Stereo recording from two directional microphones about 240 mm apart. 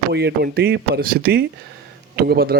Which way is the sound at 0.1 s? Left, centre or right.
Right.